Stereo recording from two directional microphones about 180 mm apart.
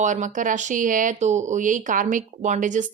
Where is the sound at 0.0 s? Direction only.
45° right (ahead or behind).